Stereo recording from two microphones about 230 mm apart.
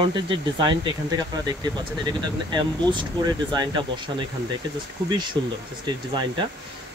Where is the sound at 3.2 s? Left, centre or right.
Centre.